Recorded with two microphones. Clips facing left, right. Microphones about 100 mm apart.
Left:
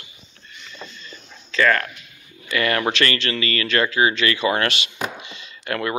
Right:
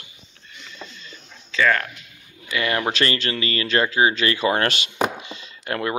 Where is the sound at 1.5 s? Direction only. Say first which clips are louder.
Left 1 dB; 5° right (ahead or behind).